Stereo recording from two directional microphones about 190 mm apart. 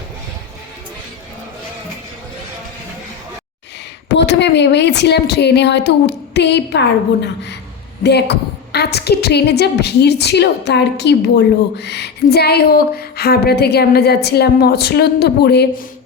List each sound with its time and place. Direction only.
4.1 s a woman's voice: 65° left (ahead or behind)